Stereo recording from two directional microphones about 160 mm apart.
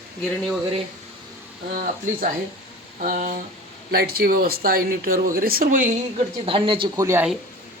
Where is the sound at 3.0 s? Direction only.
55° right (ahead or behind).